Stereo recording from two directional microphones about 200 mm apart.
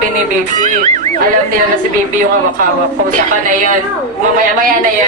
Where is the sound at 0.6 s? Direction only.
35° right (ahead or behind).